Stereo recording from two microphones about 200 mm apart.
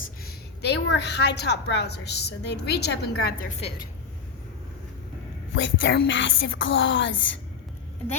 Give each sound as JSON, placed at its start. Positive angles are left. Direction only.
{"t": 0.3, "sound": "a woman's voice", "side_deg": 55}
{"t": 5.5, "sound": "music", "side_deg": 65}